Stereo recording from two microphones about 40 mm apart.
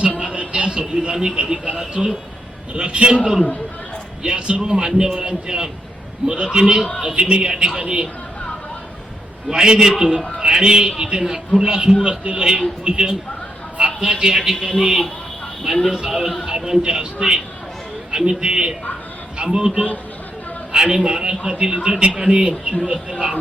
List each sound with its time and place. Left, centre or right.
0.2 s a man's voice: right
4.2 s a man's voice: right
9.5 s a man's voice: right
12.0 s a man's voice: right
12.4 s a man's voice: centre